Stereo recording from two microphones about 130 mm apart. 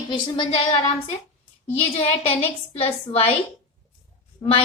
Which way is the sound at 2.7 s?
50° left (ahead or behind).